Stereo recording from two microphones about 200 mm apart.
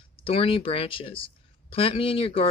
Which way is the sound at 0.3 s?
25° left (ahead or behind).